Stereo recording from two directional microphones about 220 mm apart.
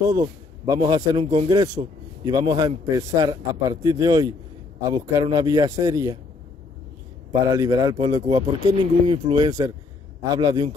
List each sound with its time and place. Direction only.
0.1 s a man's voice: 20° right (ahead or behind)
7.4 s speech: 15° right (ahead or behind)